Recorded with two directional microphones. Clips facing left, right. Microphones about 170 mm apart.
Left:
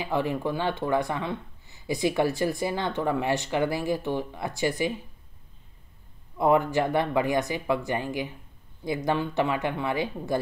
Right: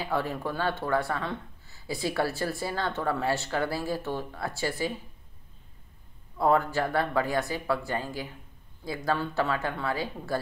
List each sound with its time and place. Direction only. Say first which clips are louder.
0.0 s speech: left 3 dB; 15° left (ahead or behind)
6.3 s speech: left 2 dB; 15° left (ahead or behind)